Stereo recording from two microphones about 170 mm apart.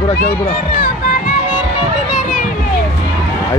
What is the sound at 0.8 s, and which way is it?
Music, 60° left (ahead or behind).